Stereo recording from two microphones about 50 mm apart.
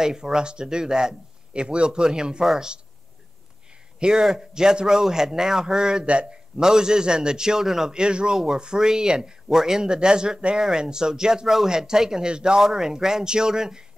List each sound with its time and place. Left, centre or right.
0.0 s speech: centre
2.4 s speech: centre
4.0 s speech: centre